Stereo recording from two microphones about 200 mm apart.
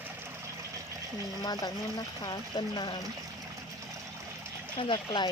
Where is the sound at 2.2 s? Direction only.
20° left (ahead or behind).